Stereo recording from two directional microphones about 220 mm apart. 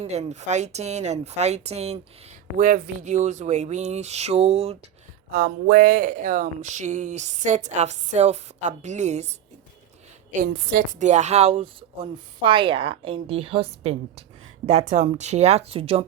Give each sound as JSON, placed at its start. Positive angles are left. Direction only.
{"t": 0.0, "sound": "speech", "side_deg": -30}
{"t": 5.3, "sound": "speech", "side_deg": -40}
{"t": 10.4, "sound": "a woman's voice", "side_deg": -40}